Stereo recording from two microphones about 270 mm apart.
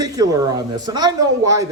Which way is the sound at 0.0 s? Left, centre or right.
Centre.